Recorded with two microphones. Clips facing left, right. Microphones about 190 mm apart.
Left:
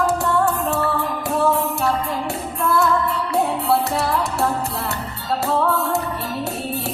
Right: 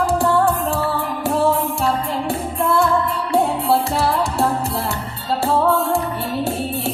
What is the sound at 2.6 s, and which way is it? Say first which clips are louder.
Music: right 1 dB; 30° right (ahead or behind).